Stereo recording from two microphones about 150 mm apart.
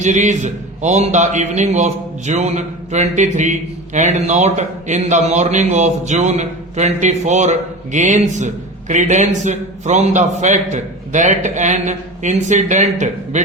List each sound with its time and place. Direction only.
0.0 s a man's voice: 50° right (ahead or behind)